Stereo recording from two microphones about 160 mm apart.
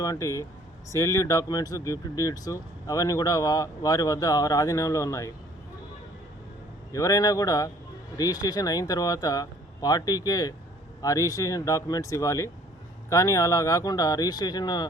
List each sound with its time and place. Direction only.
0.0 s speech: 20° left (ahead or behind)
6.9 s speech: 20° left (ahead or behind)